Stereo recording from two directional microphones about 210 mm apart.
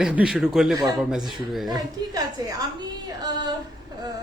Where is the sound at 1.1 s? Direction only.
Centre (ahead or behind).